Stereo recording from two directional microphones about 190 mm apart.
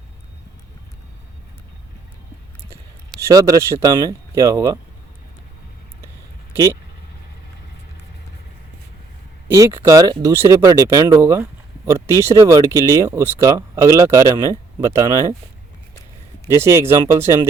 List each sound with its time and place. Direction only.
3.2 s speech: 15° right (ahead or behind)
9.5 s speech: 15° right (ahead or behind)
16.6 s speech: 15° right (ahead or behind)